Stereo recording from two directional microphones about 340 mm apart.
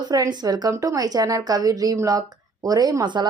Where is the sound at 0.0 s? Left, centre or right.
Centre.